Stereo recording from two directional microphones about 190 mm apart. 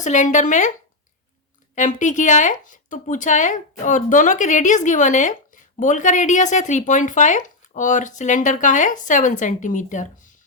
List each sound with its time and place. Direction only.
0.0 s speech: 40° left (ahead or behind)
1.7 s speech: 40° left (ahead or behind)